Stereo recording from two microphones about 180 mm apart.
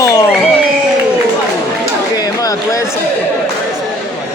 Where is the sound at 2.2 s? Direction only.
20° left (ahead or behind).